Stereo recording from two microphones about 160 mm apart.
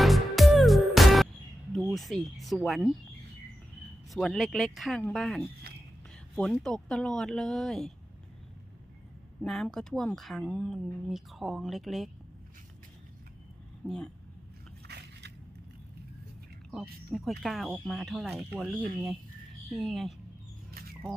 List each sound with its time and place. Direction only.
0.0 s music: centre (ahead or behind)
1.7 s speech: centre (ahead or behind)
4.1 s speech: centre (ahead or behind)
5.7 s whispering: 80° right
6.3 s speech: 5° left (ahead or behind)
9.4 s speech: 5° left (ahead or behind)
13.8 s speech: 5° left (ahead or behind)
14.8 s biting: 90° right
16.7 s speech: centre (ahead or behind)
20.7 s a sound: 70° right (ahead or behind)